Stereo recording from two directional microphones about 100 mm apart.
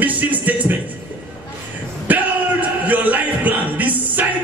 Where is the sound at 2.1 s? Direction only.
15° right (ahead or behind).